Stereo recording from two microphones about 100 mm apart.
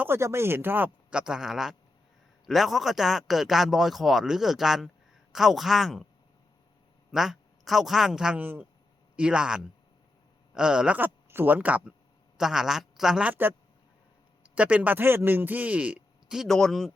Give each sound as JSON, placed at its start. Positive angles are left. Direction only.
{"t": 0.0, "sound": "speech", "side_deg": -25}
{"t": 7.1, "sound": "a woman's voice", "side_deg": -5}
{"t": 8.4, "sound": "speech", "side_deg": -20}
{"t": 14.5, "sound": "speech", "side_deg": -15}